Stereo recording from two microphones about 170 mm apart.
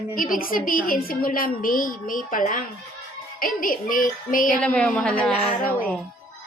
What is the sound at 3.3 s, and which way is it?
Child singing, 55° left (ahead or behind).